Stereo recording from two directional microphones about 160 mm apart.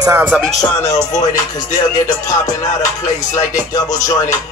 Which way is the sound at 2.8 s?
50° left (ahead or behind).